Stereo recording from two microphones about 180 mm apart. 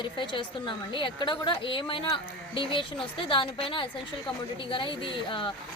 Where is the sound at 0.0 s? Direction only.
25° left (ahead or behind).